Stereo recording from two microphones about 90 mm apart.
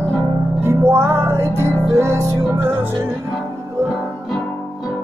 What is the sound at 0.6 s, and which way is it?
Music, 30° right (ahead or behind).